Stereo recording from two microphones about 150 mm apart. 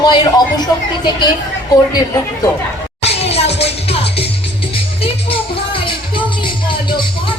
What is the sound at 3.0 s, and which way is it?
Music, 45° left (ahead or behind).